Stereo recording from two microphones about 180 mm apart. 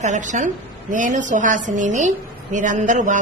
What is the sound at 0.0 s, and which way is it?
A woman's voice, 40° right (ahead or behind).